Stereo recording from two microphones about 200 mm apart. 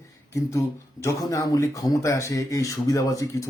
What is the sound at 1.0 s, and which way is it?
Speech, 15° left (ahead or behind).